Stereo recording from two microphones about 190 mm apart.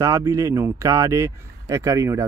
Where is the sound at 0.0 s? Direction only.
15° right (ahead or behind).